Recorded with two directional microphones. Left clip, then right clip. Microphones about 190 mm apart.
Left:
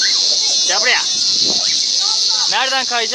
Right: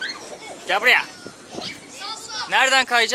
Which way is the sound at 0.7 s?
15° right (ahead or behind).